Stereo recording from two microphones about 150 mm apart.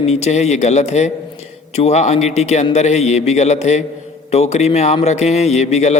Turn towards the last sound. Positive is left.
turn(degrees=50)  # may be behind; listen again after turning